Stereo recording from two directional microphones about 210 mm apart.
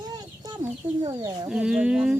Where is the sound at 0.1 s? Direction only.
20° right (ahead or behind).